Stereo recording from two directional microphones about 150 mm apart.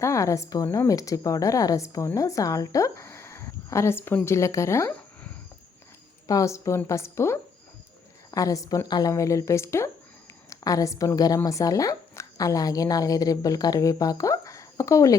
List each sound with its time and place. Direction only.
0.0 s a woman's voice: 20° left (ahead or behind)
6.2 s a woman's voice: 20° left (ahead or behind)